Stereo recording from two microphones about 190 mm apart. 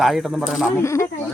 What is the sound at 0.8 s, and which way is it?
Speech, 15° left (ahead or behind).